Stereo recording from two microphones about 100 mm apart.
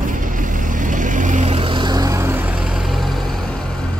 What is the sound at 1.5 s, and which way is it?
Vehicle, 60° right (ahead or behind).